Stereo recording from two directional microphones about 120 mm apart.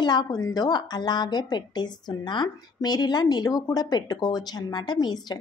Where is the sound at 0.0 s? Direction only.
40° left (ahead or behind).